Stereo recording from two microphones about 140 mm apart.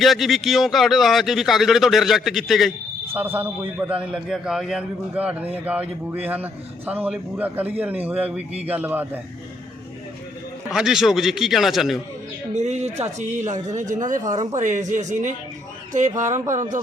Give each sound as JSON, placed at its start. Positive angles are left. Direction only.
{"t": 0.0, "sound": "a man's voice", "side_deg": 0}
{"t": 3.1, "sound": "a man's voice", "side_deg": -15}
{"t": 4.0, "sound": "a man's voice", "side_deg": -5}
{"t": 10.7, "sound": "a man's voice", "side_deg": -5}
{"t": 12.5, "sound": "speech", "side_deg": -55}